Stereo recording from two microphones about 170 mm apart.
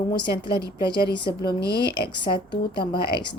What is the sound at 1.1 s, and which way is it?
Speech, 25° left (ahead or behind).